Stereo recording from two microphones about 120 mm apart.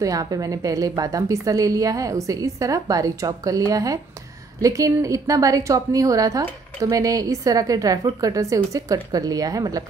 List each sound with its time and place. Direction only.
0.0 s a woman's voice: 30° right (ahead or behind)